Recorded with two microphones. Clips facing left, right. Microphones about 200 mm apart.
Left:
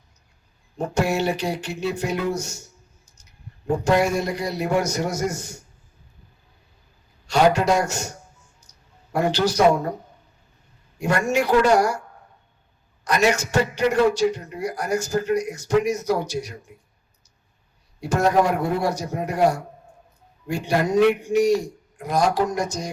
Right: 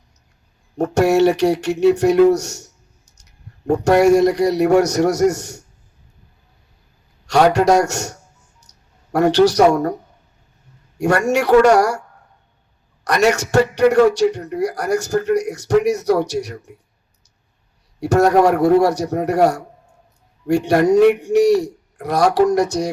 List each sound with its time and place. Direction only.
0.8 s a man's voice: 70° right (ahead or behind)
7.3 s a man's voice: 70° right (ahead or behind)
8.6 s a sound: 70° right (ahead or behind)
9.1 s a man's voice: 70° right (ahead or behind)
10.9 s a man's voice: 70° right (ahead or behind)
13.1 s a man's voice: 70° right (ahead or behind)
18.0 s a man's voice: 70° right (ahead or behind)